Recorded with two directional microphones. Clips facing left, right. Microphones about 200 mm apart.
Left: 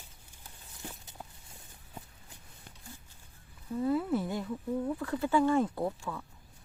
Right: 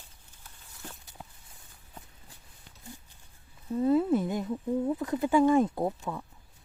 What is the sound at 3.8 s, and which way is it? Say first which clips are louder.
Speech: right 5 dB; 25° right (ahead or behind).